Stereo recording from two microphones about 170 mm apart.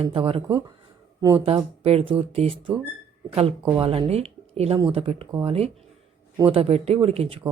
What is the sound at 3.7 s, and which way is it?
Speech, 30° right (ahead or behind).